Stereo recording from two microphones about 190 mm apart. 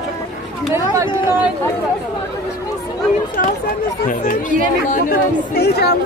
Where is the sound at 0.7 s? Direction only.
15° right (ahead or behind).